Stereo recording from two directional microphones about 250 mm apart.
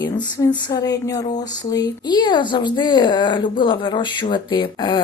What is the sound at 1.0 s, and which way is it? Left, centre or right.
Speech, centre.